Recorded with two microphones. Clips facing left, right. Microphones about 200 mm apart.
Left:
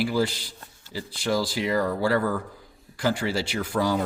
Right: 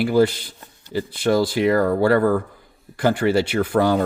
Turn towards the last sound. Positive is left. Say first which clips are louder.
# right 7 dB
turn(degrees=-60)  # may be behind; listen again after turning